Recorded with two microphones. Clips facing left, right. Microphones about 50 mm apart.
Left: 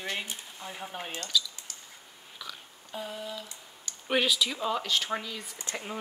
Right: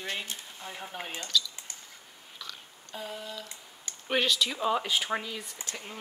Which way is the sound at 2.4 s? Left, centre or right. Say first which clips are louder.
Left 2 dB; centre.